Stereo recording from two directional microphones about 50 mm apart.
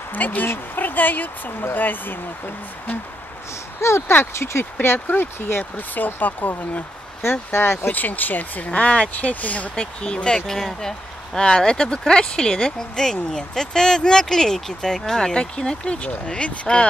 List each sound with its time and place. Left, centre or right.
0.1 s speech: left
4.1 s speech: left
4.8 s speech: left
7.2 s speech: left
7.9 s speech: left
9.8 s speech: centre